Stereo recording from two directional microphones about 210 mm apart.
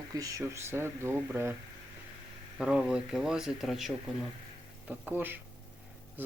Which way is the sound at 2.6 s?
5° right (ahead or behind).